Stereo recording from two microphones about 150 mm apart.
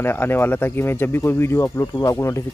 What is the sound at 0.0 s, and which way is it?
Speech, 15° left (ahead or behind).